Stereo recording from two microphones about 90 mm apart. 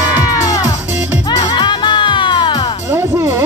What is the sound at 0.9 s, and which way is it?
Music, 20° right (ahead or behind).